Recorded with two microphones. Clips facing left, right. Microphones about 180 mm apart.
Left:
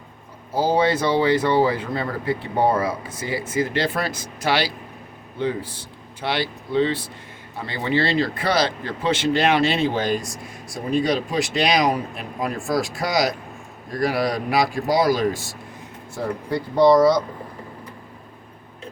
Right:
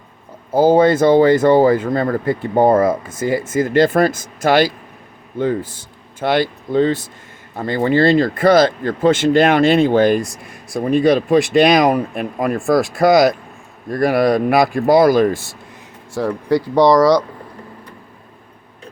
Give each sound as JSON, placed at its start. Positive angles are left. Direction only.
{"t": 0.5, "sound": "speech", "side_deg": -50}
{"t": 16.1, "sound": "speech", "side_deg": -90}